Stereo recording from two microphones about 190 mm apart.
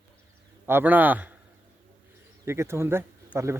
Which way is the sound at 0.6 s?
10° right (ahead or behind).